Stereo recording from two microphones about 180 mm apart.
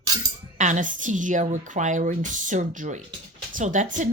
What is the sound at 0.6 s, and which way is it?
Speech, 45° right (ahead or behind).